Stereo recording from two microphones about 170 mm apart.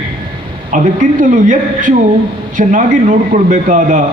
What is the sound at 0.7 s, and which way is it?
A man's voice, 50° right (ahead or behind).